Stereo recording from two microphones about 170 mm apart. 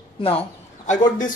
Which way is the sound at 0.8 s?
45° left (ahead or behind).